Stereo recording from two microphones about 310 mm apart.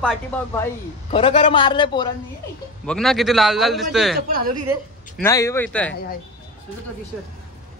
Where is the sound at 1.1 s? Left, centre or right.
Centre.